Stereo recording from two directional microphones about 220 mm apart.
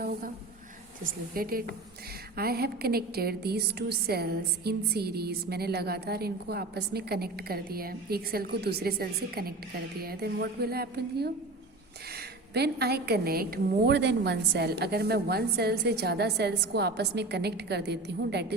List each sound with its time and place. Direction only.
1.0 s a woman's voice: 40° right (ahead or behind)